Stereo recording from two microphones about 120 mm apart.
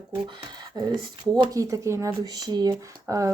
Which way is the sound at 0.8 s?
30° right (ahead or behind).